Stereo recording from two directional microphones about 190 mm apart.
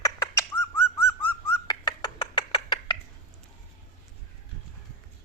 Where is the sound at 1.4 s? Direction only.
25° left (ahead or behind).